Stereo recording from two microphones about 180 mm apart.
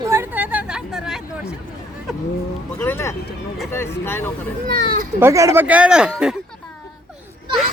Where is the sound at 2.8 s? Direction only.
15° left (ahead or behind).